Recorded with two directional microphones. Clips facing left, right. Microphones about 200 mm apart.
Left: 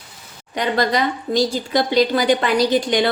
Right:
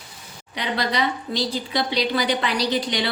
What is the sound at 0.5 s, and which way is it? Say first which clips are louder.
A woman's voice: left 6 dB; 45° left (ahead or behind).